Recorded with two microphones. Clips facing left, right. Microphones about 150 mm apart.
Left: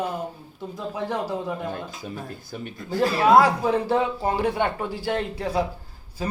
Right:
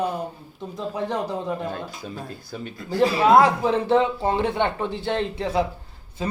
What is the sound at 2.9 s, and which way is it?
Speech, centre (ahead or behind).